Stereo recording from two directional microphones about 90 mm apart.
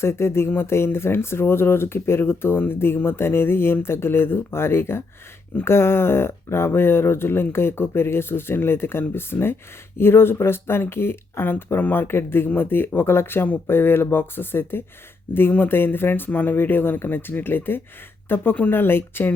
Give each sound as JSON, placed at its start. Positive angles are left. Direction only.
{"t": 0.0, "sound": "speech", "side_deg": 30}